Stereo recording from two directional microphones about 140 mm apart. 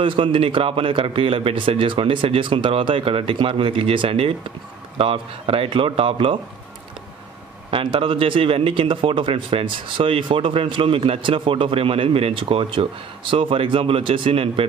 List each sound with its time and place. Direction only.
0.0 s speech: 40° right (ahead or behind)
7.7 s speech: 40° right (ahead or behind)